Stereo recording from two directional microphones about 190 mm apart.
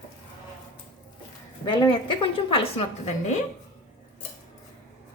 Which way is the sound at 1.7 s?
25° left (ahead or behind).